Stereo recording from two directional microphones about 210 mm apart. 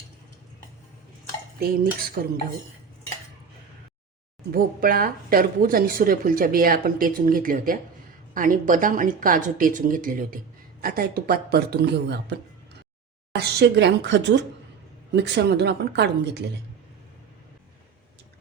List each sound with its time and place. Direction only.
1.5 s speech: 45° right (ahead or behind)
4.5 s speech: 45° right (ahead or behind)